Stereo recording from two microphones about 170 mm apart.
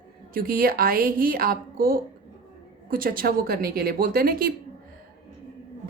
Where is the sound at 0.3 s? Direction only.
60° right (ahead or behind).